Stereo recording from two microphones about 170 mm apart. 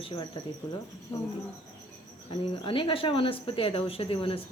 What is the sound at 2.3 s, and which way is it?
Speech, 30° left (ahead or behind).